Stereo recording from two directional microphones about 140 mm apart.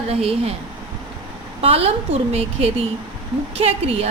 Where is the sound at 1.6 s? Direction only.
45° right (ahead or behind).